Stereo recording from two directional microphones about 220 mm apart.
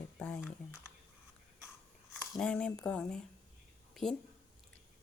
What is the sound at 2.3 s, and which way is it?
A woman's voice, 5° left (ahead or behind).